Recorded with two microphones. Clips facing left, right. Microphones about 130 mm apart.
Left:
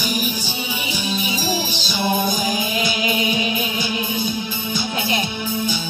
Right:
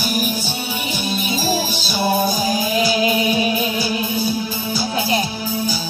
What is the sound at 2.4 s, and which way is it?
Music, 40° right (ahead or behind).